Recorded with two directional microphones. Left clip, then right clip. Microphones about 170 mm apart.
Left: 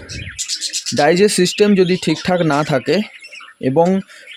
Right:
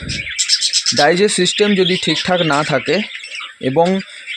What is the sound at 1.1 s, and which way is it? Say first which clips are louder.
Speech: even; 25° left (ahead or behind).